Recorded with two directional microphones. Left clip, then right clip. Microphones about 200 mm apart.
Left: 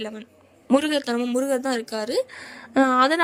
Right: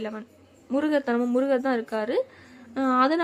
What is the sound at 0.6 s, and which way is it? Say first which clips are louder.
Speech: left 4 dB; 45° left (ahead or behind).